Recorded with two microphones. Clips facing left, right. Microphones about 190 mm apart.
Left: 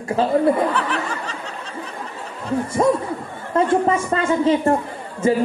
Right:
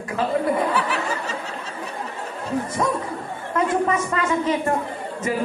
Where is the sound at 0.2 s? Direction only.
30° left (ahead or behind).